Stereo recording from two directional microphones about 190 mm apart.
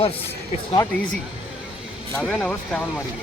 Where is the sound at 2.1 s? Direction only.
5° left (ahead or behind).